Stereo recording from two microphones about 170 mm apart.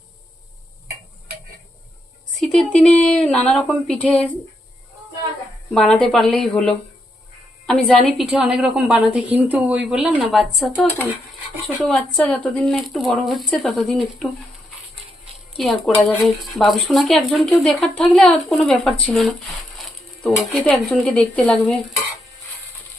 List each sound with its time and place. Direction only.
2.4 s a woman's voice: 5° left (ahead or behind)
5.7 s a woman's voice: 5° left (ahead or behind)
11.9 s a woman's voice: centre (ahead or behind)
15.5 s a woman's voice: centre (ahead or behind)
20.5 s a woman's voice: centre (ahead or behind)